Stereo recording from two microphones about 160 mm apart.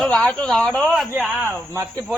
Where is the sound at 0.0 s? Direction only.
5° left (ahead or behind).